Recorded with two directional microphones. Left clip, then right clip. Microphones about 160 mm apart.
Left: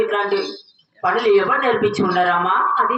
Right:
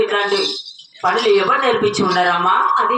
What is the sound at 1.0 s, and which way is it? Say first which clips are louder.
Speech: right 1 dB; 20° right (ahead or behind).